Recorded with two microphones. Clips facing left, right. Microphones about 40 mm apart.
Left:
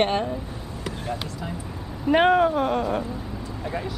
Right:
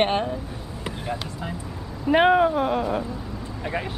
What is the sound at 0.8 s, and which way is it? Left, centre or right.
Vehicle, centre.